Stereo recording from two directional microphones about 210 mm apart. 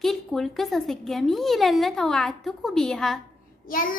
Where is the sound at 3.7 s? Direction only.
40° left (ahead or behind).